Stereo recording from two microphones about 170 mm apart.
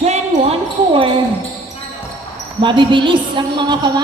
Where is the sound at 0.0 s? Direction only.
40° right (ahead or behind).